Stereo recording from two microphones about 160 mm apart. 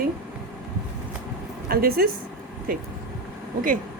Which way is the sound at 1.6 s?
70° right (ahead or behind).